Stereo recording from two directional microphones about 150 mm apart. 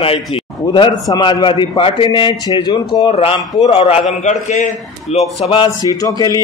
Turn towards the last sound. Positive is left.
turn(degrees=25)  # may be behind; listen again after turning